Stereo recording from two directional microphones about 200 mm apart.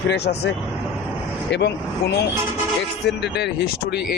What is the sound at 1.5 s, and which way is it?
Speech, 55° left (ahead or behind).